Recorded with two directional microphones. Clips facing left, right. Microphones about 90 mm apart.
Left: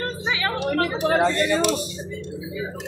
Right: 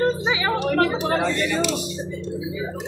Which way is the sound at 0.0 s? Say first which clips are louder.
Right 5 dB; 20° right (ahead or behind).